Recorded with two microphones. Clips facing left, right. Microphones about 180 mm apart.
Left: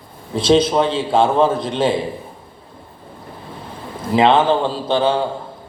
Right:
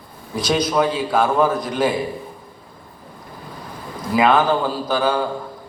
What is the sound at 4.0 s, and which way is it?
A man's voice, 25° left (ahead or behind).